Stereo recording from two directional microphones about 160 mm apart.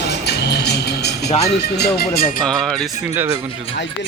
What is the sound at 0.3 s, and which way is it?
Music, 90° left.